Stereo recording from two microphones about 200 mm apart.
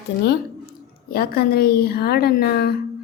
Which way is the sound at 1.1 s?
50° left (ahead or behind).